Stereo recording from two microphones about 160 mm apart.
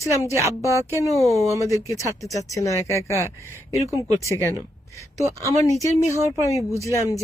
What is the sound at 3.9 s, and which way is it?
Speech, 20° right (ahead or behind).